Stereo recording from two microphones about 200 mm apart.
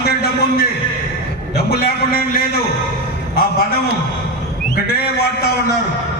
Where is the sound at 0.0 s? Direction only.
50° left (ahead or behind).